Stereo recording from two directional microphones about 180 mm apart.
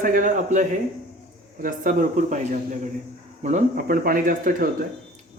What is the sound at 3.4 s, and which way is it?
A man's voice, 40° right (ahead or behind).